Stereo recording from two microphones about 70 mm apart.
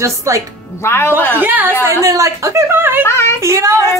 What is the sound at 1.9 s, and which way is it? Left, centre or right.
Speech, right.